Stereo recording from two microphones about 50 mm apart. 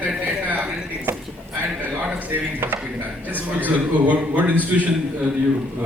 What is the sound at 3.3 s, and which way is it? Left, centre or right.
A man's voice, right.